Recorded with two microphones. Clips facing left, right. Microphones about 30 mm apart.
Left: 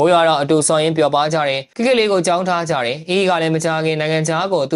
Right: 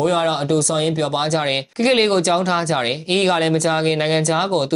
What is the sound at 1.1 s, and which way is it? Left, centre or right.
Speech, centre.